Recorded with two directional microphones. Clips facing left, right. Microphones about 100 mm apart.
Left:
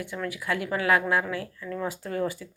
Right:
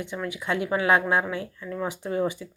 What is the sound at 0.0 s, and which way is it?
A woman's voice, 20° right (ahead or behind).